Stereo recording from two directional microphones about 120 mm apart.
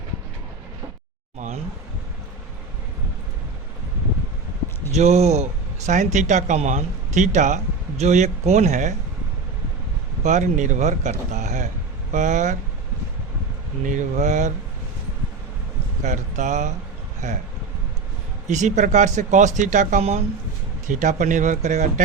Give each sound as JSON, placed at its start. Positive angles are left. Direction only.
{"t": 4.9, "sound": "speech", "side_deg": -65}
{"t": 10.2, "sound": "speech", "side_deg": -85}
{"t": 13.8, "sound": "speech", "side_deg": -85}
{"t": 16.0, "sound": "speech", "side_deg": -90}
{"t": 18.4, "sound": "speech", "side_deg": -85}
{"t": 20.8, "sound": "speech", "side_deg": -90}